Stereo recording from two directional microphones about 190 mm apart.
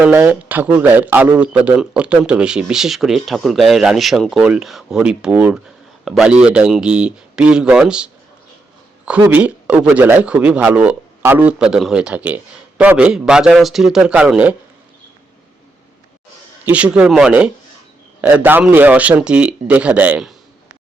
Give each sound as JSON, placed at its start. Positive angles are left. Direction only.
{"t": 0.0, "sound": "speech", "side_deg": -10}
{"t": 16.6, "sound": "speech", "side_deg": -5}